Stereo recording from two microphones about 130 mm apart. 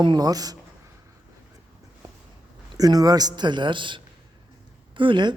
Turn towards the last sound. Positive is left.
turn(degrees=-40)  # may be behind; listen again after turning